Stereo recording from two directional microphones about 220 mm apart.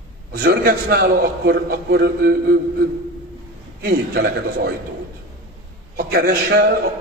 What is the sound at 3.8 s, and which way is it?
Speech, 45° right (ahead or behind).